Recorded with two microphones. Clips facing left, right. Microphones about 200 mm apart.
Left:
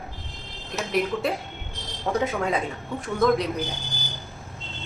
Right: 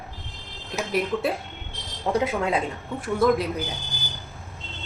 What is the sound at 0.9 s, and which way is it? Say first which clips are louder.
A woman's voice: even; 5° right (ahead or behind).